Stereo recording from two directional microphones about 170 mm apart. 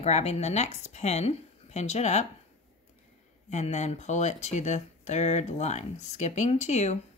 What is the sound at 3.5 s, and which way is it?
Speech, 40° left (ahead or behind).